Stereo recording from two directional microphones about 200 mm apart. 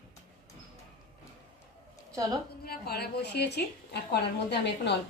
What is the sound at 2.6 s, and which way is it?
A woman's voice, 50° left (ahead or behind).